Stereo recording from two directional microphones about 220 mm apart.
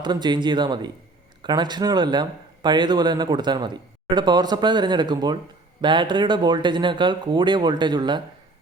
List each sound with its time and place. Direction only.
0.0 s speech: 20° right (ahead or behind)